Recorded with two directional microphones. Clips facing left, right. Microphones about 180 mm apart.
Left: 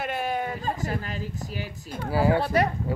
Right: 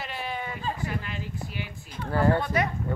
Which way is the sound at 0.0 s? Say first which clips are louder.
Left 6 dB; 50° left (ahead or behind).